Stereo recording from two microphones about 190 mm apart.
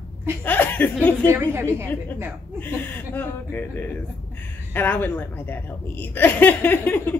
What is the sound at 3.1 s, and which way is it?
A woman's voice, 10° left (ahead or behind).